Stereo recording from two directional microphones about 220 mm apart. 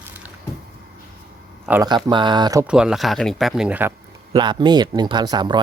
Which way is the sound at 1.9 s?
20° right (ahead or behind).